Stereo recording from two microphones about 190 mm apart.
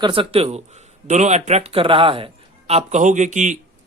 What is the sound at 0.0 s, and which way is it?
A man's voice, 25° right (ahead or behind).